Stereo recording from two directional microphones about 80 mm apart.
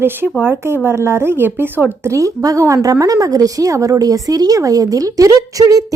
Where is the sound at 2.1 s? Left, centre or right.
Right.